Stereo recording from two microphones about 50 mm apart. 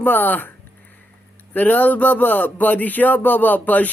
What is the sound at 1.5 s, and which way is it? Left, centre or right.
A man's voice, left.